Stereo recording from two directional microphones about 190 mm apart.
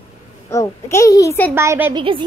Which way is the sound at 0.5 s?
15° left (ahead or behind).